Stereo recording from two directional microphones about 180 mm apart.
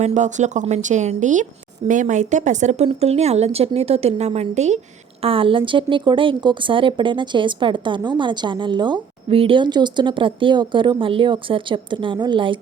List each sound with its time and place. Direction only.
0.0 s a woman's voice: 40° right (ahead or behind); by 12.5 s 25° right (ahead or behind)